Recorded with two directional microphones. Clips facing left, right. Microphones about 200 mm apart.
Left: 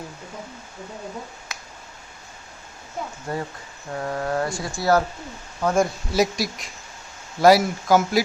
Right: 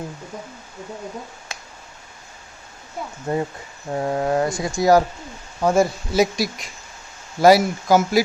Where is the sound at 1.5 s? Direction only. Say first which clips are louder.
Right 2 dB; 30° right (ahead or behind).